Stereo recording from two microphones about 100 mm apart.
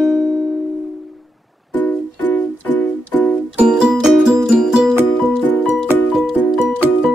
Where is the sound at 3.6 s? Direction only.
10° right (ahead or behind).